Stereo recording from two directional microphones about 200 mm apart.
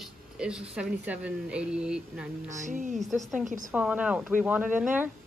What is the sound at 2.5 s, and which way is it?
Speech, 40° right (ahead or behind).